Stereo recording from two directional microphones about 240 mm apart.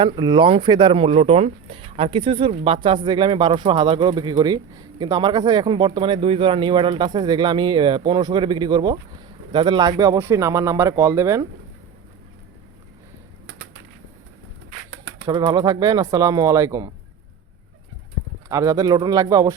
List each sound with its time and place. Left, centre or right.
0.0 s speech: centre
13.5 s a sound: right
15.3 s speech: centre
18.4 s speech: centre